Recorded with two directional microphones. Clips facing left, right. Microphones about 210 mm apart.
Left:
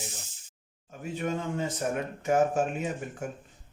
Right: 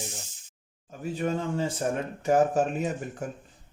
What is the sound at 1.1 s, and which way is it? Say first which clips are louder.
Speech: right 2 dB; 35° right (ahead or behind).